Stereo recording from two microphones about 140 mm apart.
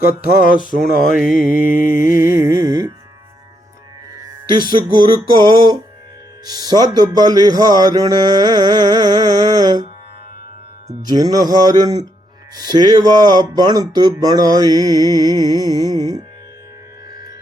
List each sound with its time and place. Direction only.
0.0 s music: 90° left
1.1 s mantra: centre (ahead or behind)
1.5 s music: 80° left
2.1 s music: 20° right (ahead or behind)
4.7 s music: 30° right (ahead or behind)
10.8 s music: 25° right (ahead or behind)